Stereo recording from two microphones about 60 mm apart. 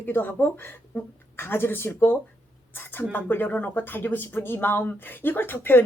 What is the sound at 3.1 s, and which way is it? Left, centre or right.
Speech, left.